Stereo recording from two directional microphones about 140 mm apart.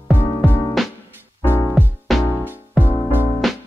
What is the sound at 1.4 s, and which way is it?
Music, 15° left (ahead or behind).